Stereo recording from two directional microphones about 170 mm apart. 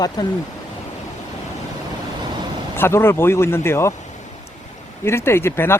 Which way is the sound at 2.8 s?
15° left (ahead or behind).